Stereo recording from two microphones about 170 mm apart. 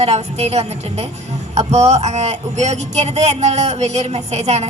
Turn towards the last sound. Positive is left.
turn(degrees=-40)  # may be behind; listen again after turning